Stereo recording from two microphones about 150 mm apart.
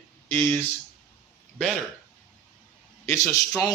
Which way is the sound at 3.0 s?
20° left (ahead or behind).